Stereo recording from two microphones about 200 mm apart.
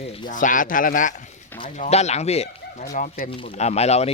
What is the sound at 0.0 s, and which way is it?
Speech, 30° left (ahead or behind).